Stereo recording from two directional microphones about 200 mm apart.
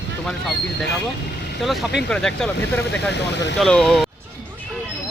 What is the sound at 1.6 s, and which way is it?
Speech, centre (ahead or behind).